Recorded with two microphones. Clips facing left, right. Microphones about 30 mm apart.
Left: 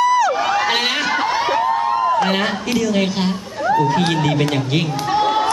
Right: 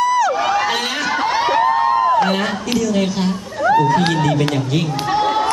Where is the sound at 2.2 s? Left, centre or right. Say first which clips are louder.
Even; centre.